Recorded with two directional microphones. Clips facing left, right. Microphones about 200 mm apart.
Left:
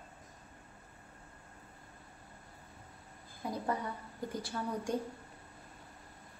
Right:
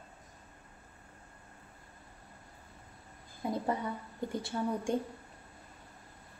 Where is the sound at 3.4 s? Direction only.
25° right (ahead or behind).